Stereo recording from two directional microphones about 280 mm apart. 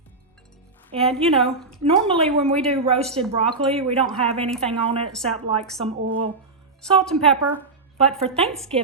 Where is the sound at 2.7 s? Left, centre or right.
Right.